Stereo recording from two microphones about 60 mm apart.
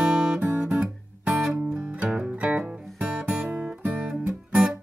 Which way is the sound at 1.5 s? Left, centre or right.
Centre.